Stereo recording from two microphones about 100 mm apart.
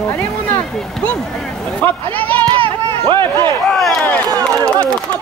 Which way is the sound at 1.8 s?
15° left (ahead or behind).